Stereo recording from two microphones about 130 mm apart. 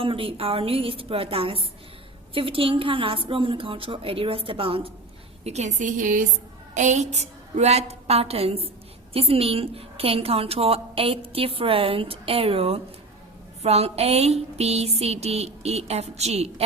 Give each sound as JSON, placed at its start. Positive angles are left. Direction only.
{"t": 0.0, "sound": "a woman's voice", "side_deg": -45}
{"t": 5.4, "sound": "a woman's voice", "side_deg": -55}
{"t": 6.7, "sound": "a woman's voice", "side_deg": -65}